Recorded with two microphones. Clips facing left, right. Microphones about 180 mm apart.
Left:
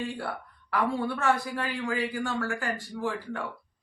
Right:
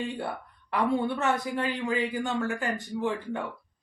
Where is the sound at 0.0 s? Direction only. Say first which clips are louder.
Right 1 dB; 20° right (ahead or behind).